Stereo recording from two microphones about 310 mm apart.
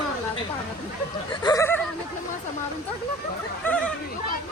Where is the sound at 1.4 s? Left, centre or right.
Centre.